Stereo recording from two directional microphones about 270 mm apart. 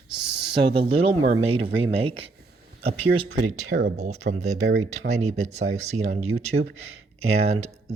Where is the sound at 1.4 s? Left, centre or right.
Right.